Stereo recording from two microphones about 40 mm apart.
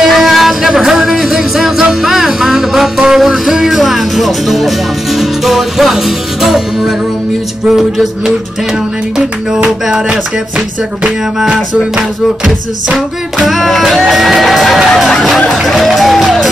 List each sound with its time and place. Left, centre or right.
0.0 s a sound: centre
0.6 s music: centre
13.5 s music: centre